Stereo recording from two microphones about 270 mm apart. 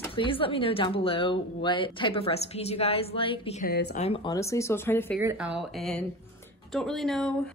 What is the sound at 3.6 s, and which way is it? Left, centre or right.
Speech, left.